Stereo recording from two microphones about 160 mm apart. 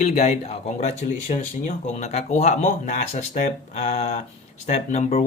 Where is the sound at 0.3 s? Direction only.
45° left (ahead or behind).